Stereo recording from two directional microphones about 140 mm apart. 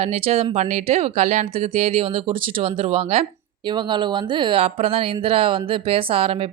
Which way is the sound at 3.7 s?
35° right (ahead or behind).